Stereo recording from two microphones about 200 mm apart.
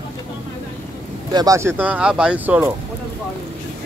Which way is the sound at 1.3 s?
20° right (ahead or behind).